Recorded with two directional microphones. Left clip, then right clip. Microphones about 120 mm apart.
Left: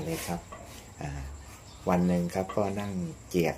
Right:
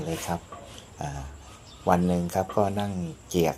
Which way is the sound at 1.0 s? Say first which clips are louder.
Right 6 dB; 20° right (ahead or behind).